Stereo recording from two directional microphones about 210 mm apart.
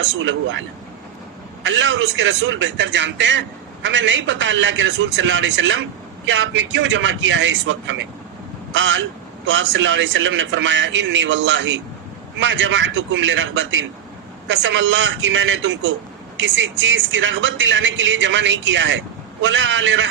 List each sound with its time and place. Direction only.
0.0 s speech: 65° right (ahead or behind)
1.6 s speech: 60° right (ahead or behind)